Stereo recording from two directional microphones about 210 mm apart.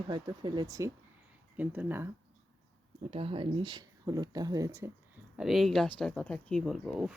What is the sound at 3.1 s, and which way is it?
Speech, 25° right (ahead or behind).